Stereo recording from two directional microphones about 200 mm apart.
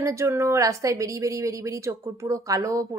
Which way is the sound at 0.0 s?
15° right (ahead or behind).